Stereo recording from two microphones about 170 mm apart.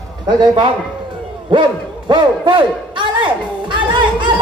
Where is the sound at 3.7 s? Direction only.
30° right (ahead or behind).